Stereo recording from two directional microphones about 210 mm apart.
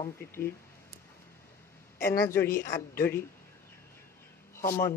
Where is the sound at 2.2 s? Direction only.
10° left (ahead or behind).